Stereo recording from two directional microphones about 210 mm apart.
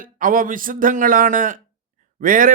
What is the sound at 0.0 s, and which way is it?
A man's voice, 40° right (ahead or behind).